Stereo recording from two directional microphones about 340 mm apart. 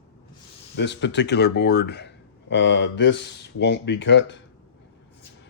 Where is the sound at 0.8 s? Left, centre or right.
Left.